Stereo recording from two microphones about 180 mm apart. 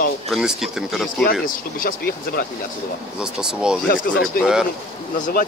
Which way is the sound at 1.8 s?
50° left (ahead or behind).